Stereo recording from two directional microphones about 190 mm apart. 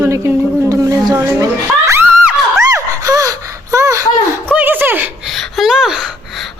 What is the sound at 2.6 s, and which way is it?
Gasp, 15° right (ahead or behind).